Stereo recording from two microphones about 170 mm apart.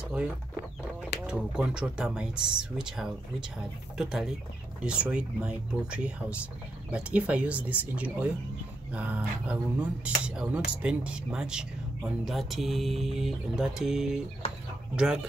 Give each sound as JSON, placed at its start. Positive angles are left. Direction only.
{"t": 1.2, "sound": "speech", "side_deg": -5}